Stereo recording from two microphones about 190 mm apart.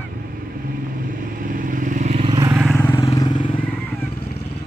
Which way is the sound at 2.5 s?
5° right (ahead or behind).